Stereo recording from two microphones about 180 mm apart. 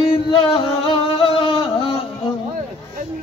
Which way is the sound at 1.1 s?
25° left (ahead or behind).